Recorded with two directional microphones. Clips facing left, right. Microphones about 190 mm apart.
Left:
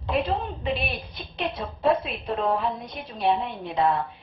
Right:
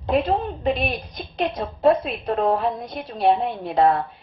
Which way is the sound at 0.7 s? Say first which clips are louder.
Right 4 dB; 40° right (ahead or behind).